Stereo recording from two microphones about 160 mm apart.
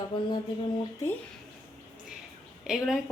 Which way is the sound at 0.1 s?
30° left (ahead or behind).